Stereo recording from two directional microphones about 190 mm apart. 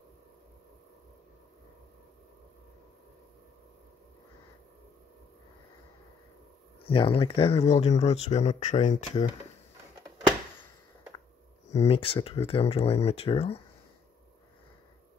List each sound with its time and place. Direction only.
6.9 s speech: 30° left (ahead or behind)
11.7 s speech: 30° left (ahead or behind)